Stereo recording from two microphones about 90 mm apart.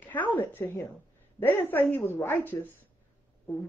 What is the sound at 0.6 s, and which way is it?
Speech, 25° left (ahead or behind).